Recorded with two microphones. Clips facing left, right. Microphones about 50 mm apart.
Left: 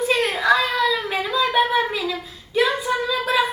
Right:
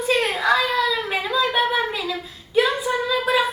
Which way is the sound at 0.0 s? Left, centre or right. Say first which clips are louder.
Even; centre.